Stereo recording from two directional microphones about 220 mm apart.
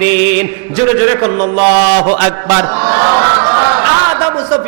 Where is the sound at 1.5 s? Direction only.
40° right (ahead or behind).